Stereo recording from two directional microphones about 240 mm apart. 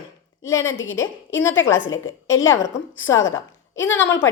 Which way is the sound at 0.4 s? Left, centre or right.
Centre.